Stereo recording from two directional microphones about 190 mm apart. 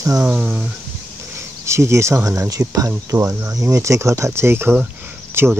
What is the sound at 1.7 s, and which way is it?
Speech, 15° right (ahead or behind).